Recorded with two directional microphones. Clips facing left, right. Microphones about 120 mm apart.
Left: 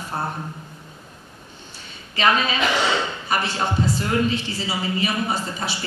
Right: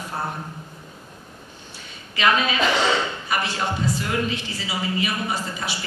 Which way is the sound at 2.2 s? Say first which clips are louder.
Even; 30° left (ahead or behind).